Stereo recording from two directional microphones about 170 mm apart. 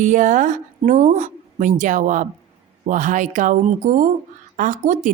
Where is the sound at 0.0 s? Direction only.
45° right (ahead or behind).